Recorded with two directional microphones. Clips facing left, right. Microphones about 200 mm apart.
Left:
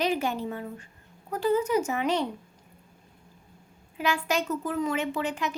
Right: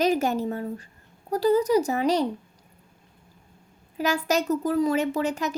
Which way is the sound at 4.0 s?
40° right (ahead or behind).